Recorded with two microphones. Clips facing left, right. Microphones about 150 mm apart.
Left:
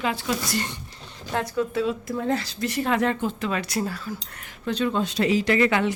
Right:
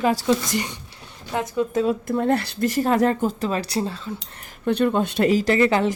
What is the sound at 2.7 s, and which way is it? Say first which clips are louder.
Speech: right 4 dB; 40° right (ahead or behind).